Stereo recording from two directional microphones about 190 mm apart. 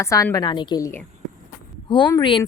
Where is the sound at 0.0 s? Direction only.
15° left (ahead or behind).